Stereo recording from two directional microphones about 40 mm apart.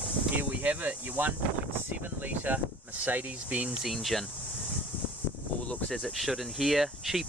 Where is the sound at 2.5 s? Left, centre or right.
Right.